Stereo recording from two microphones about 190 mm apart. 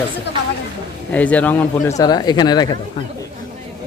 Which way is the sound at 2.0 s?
20° left (ahead or behind).